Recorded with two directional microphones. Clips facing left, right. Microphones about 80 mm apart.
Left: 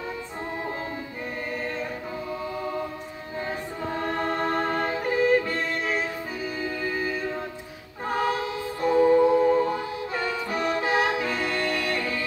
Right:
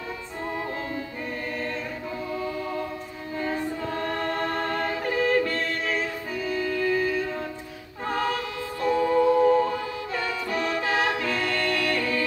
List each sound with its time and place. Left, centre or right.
3.3 s choir: centre
6.4 s music: centre